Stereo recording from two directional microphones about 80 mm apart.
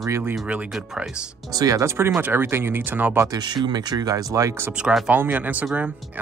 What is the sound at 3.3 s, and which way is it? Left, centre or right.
Speech, right.